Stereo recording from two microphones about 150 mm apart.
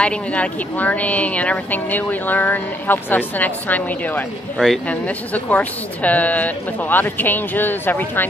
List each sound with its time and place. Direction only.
0.0 s a woman's voice: 10° left (ahead or behind)